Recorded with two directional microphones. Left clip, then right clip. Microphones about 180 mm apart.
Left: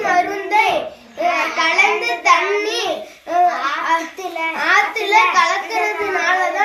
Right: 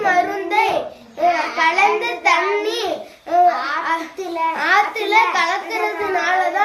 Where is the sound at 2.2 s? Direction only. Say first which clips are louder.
Left 2 dB; 15° right (ahead or behind).